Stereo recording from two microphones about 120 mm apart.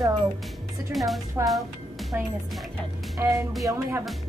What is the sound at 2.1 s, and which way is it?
Speech, 15° right (ahead or behind).